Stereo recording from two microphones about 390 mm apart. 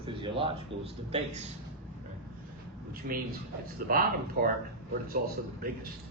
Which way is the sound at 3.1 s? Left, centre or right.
Right.